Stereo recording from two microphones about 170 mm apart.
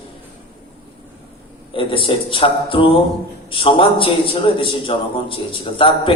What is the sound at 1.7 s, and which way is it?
A man's voice, 30° left (ahead or behind).